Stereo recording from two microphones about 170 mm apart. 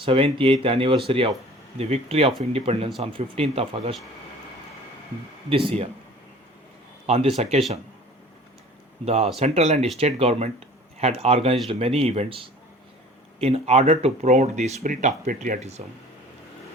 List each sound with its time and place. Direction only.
0.0 s speech: 30° right (ahead or behind)
5.5 s speech: 30° right (ahead or behind)
7.1 s speech: 35° right (ahead or behind)
9.0 s speech: 35° right (ahead or behind)